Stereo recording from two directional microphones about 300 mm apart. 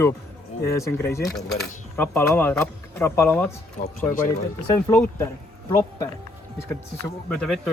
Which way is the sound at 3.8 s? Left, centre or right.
Left.